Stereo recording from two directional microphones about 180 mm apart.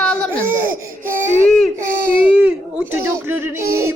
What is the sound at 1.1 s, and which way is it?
Speech, 45° right (ahead or behind).